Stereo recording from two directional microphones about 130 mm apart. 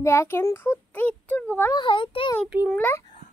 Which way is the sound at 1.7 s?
40° left (ahead or behind).